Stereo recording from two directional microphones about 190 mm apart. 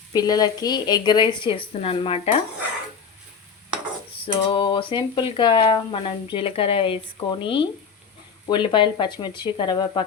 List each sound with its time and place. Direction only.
0.1 s speech: 20° left (ahead or behind)
4.3 s speech: 25° left (ahead or behind)